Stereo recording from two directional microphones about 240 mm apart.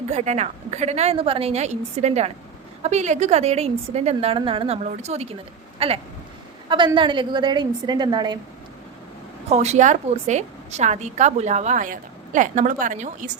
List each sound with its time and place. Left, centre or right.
0.1 s a woman's voice: right
9.5 s a woman's voice: right